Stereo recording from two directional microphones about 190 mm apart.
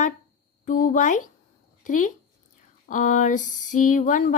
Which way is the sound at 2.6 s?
45° left (ahead or behind).